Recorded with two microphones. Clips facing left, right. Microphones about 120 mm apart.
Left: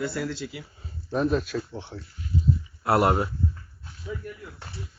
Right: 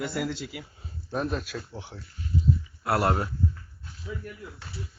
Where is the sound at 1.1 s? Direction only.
Centre (ahead or behind).